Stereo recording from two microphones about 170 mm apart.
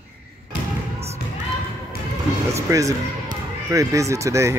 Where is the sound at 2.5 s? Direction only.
20° right (ahead or behind).